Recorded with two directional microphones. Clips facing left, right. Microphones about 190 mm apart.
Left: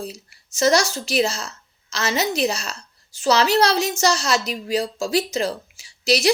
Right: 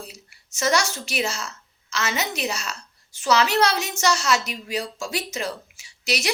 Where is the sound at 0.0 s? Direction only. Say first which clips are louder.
Left 8 dB; 35° left (ahead or behind).